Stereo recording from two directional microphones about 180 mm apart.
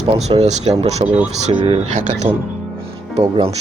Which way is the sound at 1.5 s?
35° right (ahead or behind).